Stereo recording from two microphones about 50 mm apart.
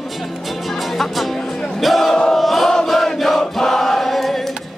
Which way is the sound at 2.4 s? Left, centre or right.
Centre.